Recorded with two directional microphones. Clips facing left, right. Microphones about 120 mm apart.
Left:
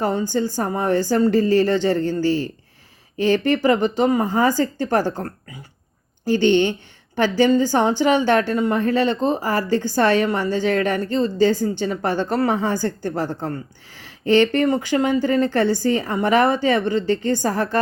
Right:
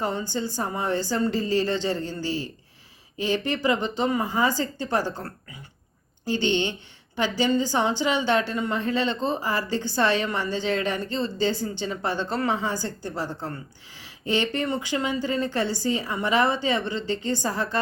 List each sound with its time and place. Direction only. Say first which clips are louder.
0.0 s a woman's voice: left 7 dB; 45° left (ahead or behind)
6.3 s a woman's voice: left 8 dB; 50° left (ahead or behind)